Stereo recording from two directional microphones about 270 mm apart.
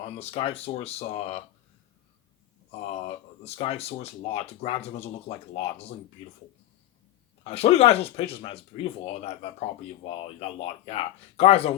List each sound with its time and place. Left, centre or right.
0.0 s speech: left
2.9 s speech: left
7.4 s speech: left